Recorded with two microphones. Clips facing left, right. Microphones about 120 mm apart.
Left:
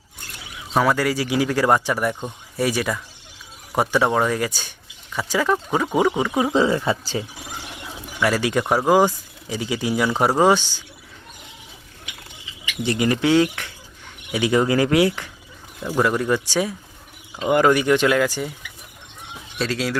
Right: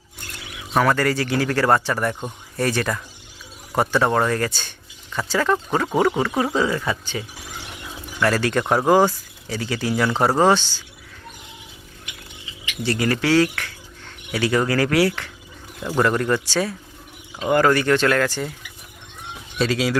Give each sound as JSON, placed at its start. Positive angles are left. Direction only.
{"t": 0.7, "sound": "speech", "side_deg": 10}
{"t": 6.6, "sound": "speech", "side_deg": 25}
{"t": 8.2, "sound": "speech", "side_deg": 10}
{"t": 12.8, "sound": "speech", "side_deg": 20}
{"t": 15.9, "sound": "speech", "side_deg": 5}
{"t": 19.5, "sound": "speech", "side_deg": 0}